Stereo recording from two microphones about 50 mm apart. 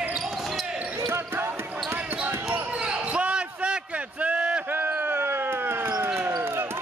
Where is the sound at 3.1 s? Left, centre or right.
Right.